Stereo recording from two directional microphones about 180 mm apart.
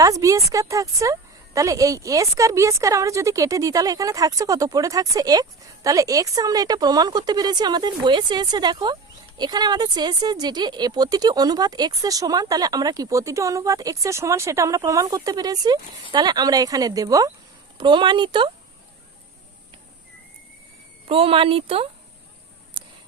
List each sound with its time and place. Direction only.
0.0 s a woman's voice: 20° right (ahead or behind)
21.1 s speech: 30° right (ahead or behind)